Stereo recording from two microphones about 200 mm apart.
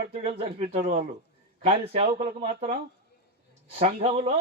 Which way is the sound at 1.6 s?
30° right (ahead or behind).